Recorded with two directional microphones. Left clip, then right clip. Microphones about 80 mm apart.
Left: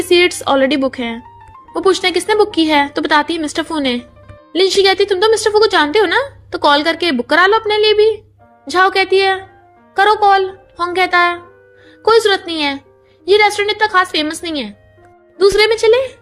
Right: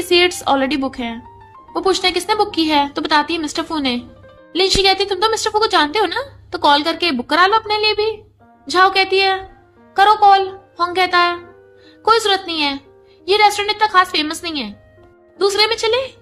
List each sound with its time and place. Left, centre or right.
0.0 s a woman's voice: left